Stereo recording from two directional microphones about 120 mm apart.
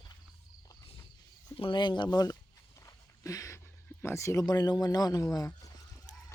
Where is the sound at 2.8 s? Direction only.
30° left (ahead or behind).